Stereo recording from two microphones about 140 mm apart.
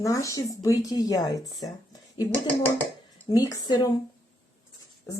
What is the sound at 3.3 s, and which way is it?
Speech, 25° left (ahead or behind).